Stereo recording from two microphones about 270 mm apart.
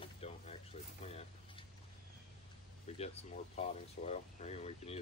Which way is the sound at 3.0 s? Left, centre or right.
Left.